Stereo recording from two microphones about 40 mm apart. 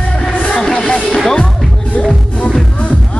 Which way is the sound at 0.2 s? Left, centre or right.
Left.